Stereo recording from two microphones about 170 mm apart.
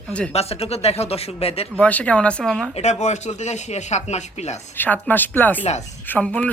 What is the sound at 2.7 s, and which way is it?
A man's voice, 40° left (ahead or behind).